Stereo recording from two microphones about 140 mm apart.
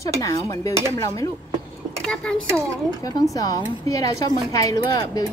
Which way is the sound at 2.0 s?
5° left (ahead or behind).